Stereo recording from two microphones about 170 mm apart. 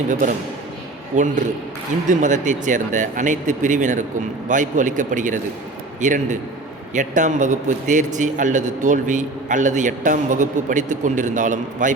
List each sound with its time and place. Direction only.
0.1 s a man's voice: 50° right (ahead or behind)